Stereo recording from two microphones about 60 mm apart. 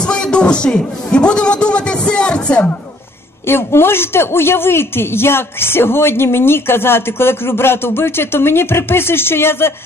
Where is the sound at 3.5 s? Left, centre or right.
Left.